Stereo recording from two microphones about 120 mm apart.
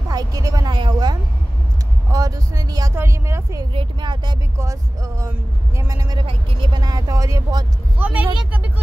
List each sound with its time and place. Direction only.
0.1 s speech: 30° right (ahead or behind)
3.7 s speech: 40° right (ahead or behind)
4.6 s speech: 25° right (ahead or behind)
6.2 s speech: 40° right (ahead or behind); by 7.6 s 25° right (ahead or behind)
8.0 s speech: 10° right (ahead or behind)